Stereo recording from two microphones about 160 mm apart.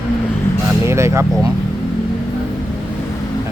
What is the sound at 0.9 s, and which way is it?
Speech, 15° right (ahead or behind).